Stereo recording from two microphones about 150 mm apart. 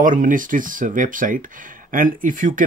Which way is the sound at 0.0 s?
60° right (ahead or behind).